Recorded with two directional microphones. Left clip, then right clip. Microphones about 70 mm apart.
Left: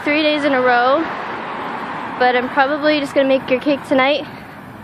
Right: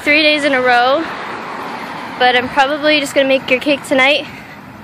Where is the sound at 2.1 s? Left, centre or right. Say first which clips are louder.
Right 3 dB; left.